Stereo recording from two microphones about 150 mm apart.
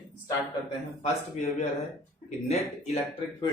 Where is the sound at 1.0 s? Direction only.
45° left (ahead or behind).